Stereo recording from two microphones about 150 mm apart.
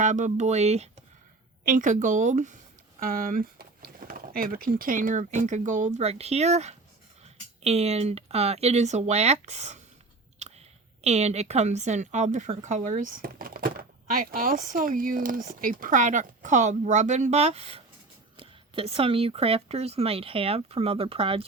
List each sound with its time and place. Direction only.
0.0 s speech: 55° right (ahead or behind)
1.6 s a woman's voice: 60° right (ahead or behind)
3.0 s speech: 70° right (ahead or behind); by 9.8 s 50° right (ahead or behind)
10.4 s chewing: 45° right (ahead or behind)
11.0 s a woman's voice: 45° right (ahead or behind)